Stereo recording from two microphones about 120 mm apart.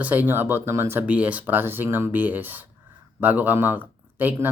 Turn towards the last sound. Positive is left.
turn(degrees=-15)  # may be behind; listen again after turning